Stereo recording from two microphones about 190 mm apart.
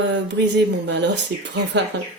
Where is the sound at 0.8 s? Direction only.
65° right (ahead or behind).